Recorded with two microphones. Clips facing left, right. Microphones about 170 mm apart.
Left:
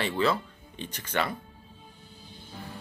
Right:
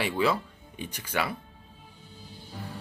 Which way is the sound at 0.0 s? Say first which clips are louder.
Even; 10° right (ahead or behind).